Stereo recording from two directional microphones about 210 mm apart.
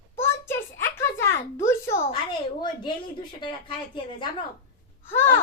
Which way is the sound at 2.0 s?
25° left (ahead or behind).